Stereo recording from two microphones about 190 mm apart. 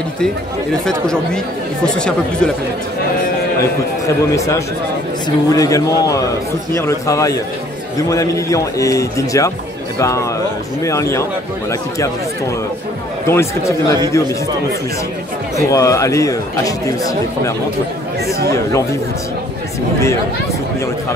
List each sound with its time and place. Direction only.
0.8 s speech: 5° left (ahead or behind)
5.5 s speech: 20° left (ahead or behind)
13.3 s speech: 15° left (ahead or behind)
15.5 s speech: 15° left (ahead or behind)